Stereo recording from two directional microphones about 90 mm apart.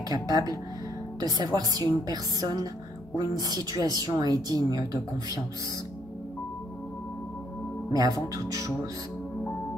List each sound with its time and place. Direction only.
0.1 s a woman's voice: 45° right (ahead or behind)
8.5 s speech: 40° right (ahead or behind)